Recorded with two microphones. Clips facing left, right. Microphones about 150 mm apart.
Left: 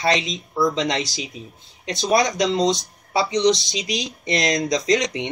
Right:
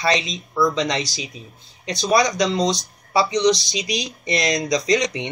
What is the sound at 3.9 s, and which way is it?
Speech, 15° right (ahead or behind).